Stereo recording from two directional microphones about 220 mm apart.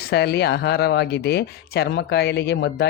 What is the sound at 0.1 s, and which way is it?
Speech, 50° left (ahead or behind).